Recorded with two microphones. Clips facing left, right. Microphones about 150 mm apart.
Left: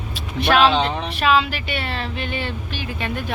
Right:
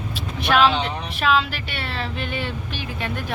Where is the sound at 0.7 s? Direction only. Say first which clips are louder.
Left 4 dB; 90° left.